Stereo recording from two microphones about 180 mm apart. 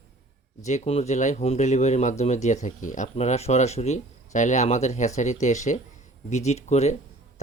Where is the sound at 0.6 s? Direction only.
35° left (ahead or behind).